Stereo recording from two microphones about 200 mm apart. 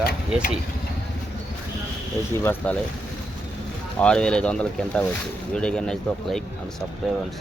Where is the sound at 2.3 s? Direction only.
10° left (ahead or behind).